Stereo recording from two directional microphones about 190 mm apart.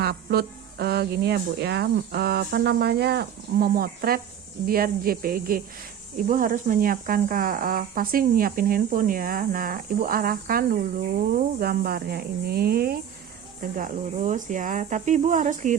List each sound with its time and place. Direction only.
0.0 s speech: 55° right (ahead or behind)